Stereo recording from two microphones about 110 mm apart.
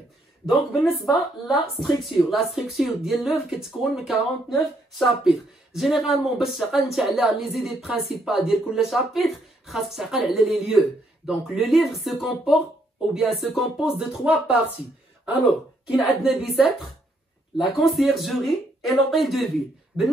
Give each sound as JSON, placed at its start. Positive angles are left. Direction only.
{"t": 0.4, "sound": "speech", "side_deg": -5}
{"t": 15.9, "sound": "speech", "side_deg": -5}
{"t": 19.9, "sound": "speech", "side_deg": 15}